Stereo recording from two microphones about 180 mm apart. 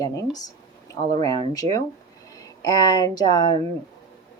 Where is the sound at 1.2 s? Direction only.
20° left (ahead or behind).